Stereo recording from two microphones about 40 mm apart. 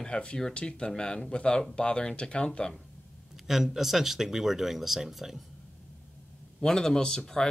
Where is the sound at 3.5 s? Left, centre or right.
Centre.